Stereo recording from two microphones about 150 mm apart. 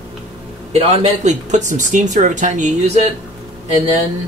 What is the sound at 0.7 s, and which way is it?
Speech, 50° right (ahead or behind).